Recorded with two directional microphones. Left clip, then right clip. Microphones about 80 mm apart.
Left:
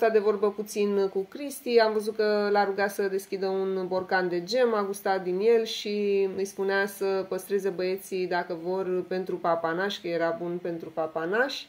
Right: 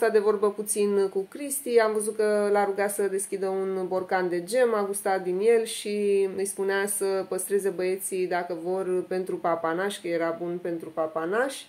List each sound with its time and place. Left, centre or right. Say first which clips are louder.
0.0 s speech: right 1 dB; centre; by 11.5 s left